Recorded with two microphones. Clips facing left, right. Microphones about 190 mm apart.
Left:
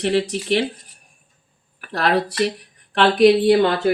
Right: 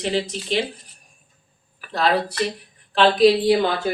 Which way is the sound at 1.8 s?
65° left (ahead or behind).